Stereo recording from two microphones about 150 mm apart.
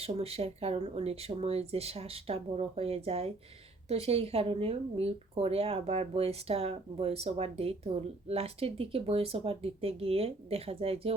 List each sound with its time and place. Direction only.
0.0 s speech: 40° right (ahead or behind)